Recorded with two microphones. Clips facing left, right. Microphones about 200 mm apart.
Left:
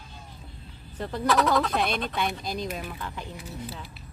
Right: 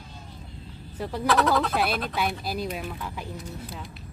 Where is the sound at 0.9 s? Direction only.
5° right (ahead or behind).